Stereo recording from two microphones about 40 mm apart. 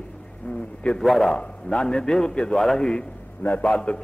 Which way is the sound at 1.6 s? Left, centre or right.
Centre.